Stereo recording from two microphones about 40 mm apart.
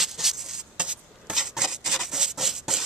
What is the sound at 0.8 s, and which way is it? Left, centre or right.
Rub, right.